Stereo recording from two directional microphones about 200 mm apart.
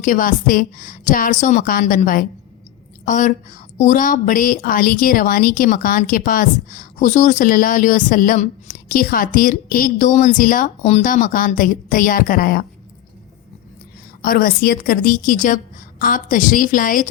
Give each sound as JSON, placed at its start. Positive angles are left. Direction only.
{"t": 0.0, "sound": "a woman's voice", "side_deg": 40}
{"t": 14.2, "sound": "a woman's voice", "side_deg": 45}